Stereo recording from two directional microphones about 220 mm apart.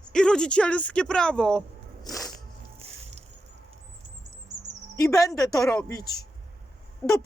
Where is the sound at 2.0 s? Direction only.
Centre (ahead or behind).